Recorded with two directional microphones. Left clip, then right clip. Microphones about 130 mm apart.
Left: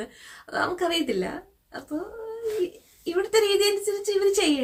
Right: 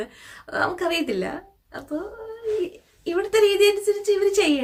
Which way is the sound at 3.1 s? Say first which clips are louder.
Right 3 dB; 25° right (ahead or behind).